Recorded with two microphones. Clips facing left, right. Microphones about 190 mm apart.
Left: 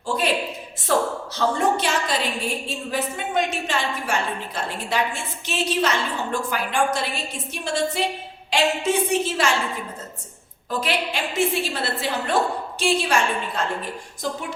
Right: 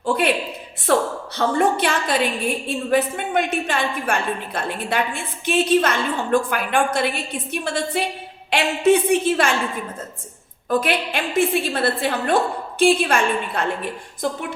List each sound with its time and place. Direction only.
0.9 s a woman's voice: 60° right (ahead or behind)
10.7 s a woman's voice: 55° right (ahead or behind)